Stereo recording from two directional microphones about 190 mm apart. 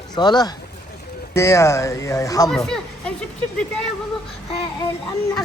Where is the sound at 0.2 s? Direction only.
20° left (ahead or behind).